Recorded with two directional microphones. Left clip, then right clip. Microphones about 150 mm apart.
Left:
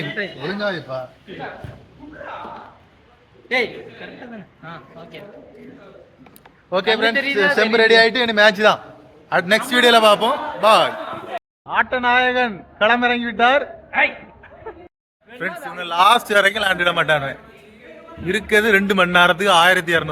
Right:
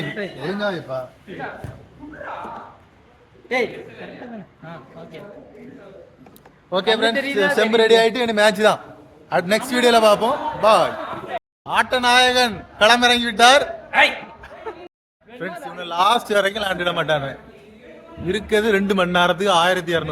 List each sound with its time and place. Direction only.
0.1 s speech: 15° right (ahead or behind)
0.6 s a man's voice: 20° left (ahead or behind)
4.6 s speech: 20° right (ahead or behind)
6.7 s a man's voice: 15° left (ahead or behind); by 13.7 s 5° right (ahead or behind)
15.6 s a man's voice: 10° left (ahead or behind)